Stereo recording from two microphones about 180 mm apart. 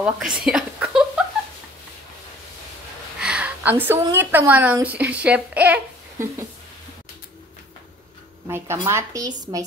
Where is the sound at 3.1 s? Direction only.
5° right (ahead or behind).